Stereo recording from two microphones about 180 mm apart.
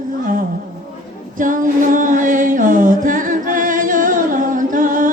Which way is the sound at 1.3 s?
45° right (ahead or behind).